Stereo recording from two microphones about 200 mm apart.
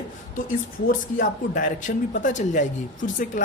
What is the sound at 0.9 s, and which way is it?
Speech, 40° left (ahead or behind).